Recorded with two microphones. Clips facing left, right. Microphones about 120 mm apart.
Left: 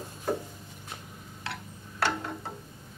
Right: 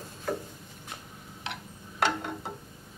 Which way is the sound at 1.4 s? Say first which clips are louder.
Even; 20° right (ahead or behind).